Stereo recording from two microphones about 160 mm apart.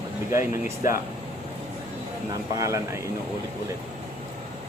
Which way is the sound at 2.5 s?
20° right (ahead or behind).